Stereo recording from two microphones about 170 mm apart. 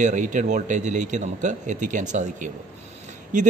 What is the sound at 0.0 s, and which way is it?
A man's voice, 45° right (ahead or behind).